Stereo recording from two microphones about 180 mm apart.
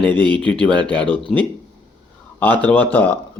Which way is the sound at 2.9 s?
10° left (ahead or behind).